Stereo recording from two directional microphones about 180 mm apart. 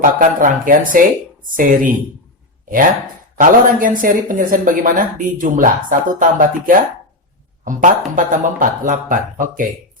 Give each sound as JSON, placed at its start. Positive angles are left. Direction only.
{"t": 0.0, "sound": "speech", "side_deg": -50}
{"t": 3.3, "sound": "speech", "side_deg": -50}